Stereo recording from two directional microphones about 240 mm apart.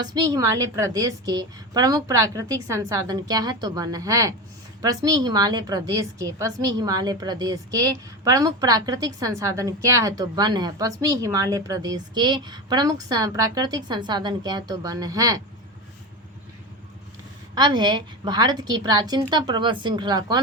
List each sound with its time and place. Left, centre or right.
0.0 s a woman's voice: centre
17.5 s a woman's voice: centre